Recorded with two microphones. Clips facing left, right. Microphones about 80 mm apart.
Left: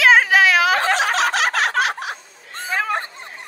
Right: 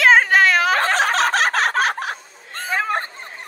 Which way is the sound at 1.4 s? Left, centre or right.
Centre.